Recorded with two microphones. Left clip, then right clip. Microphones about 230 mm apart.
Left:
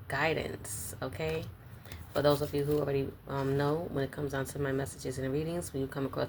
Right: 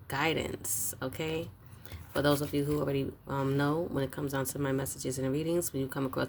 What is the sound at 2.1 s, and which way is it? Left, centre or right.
Speech, right.